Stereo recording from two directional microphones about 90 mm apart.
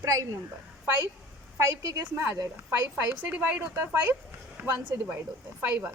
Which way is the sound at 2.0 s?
25° right (ahead or behind).